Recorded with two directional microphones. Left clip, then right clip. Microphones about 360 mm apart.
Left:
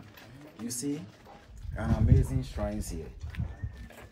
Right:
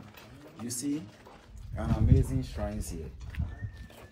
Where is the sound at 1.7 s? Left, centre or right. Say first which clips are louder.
Even; left.